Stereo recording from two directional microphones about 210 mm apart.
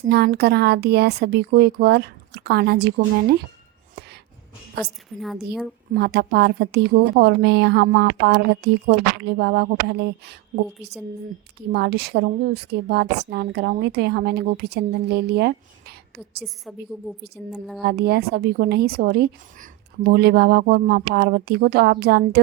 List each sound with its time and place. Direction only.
0.1 s a woman's voice: 50° right (ahead or behind)
4.8 s a woman's voice: centre (ahead or behind)
5.9 s a woman's voice: 50° right (ahead or behind)
11.7 s a woman's voice: 50° right (ahead or behind)
17.5 s a woman's voice: centre (ahead or behind)
17.8 s a woman's voice: 50° right (ahead or behind)